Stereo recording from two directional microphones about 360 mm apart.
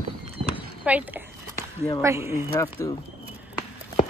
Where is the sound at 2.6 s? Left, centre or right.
Centre.